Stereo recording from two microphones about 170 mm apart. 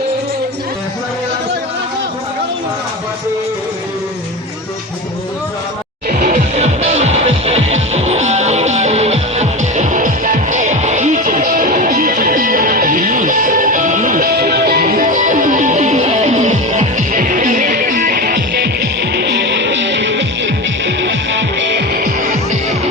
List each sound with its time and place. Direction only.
6.1 s music: 50° right (ahead or behind); by 18.7 s 70° right (ahead or behind)
19.1 s music: 90° right
22.0 s music: 50° right (ahead or behind)